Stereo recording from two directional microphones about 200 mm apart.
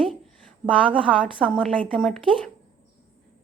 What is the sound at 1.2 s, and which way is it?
A woman's voice, 5° left (ahead or behind).